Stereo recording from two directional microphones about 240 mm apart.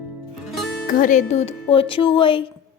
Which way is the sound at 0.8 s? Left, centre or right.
Left.